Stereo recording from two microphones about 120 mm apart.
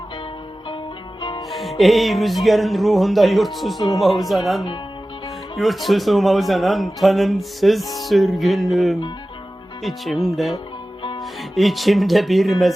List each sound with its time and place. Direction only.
1.2 s music: 40° left (ahead or behind)
1.5 s music: centre (ahead or behind)
1.8 s a man's voice: centre (ahead or behind)